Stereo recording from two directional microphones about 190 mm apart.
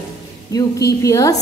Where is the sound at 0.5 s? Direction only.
20° left (ahead or behind).